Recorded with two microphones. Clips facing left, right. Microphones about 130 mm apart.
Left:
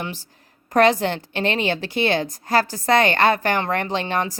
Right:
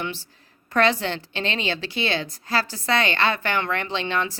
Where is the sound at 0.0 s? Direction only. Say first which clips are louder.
Even; 45° left (ahead or behind).